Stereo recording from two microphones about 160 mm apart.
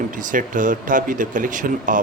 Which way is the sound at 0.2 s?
55° right (ahead or behind).